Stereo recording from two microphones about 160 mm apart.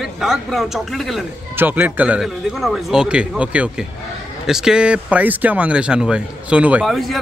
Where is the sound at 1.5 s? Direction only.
10° right (ahead or behind).